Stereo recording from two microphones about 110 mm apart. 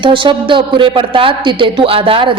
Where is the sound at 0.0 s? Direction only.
50° right (ahead or behind).